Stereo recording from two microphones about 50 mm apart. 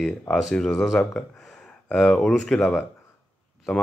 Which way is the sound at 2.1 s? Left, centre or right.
Centre.